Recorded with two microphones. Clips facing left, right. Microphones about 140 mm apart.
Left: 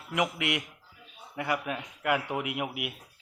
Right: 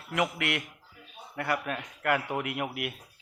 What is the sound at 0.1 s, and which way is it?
Speech, 15° left (ahead or behind).